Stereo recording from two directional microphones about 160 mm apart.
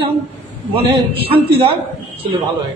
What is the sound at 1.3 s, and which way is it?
Speech, 35° right (ahead or behind).